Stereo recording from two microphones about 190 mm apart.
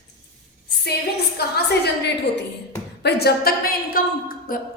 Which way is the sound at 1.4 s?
55° left (ahead or behind).